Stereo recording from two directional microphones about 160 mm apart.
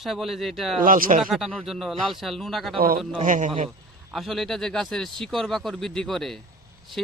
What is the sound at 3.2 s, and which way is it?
Speech, 55° right (ahead or behind).